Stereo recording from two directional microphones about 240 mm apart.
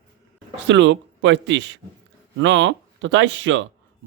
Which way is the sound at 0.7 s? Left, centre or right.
Right.